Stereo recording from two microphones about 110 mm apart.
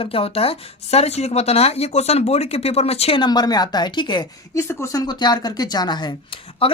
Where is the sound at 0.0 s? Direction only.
60° left (ahead or behind).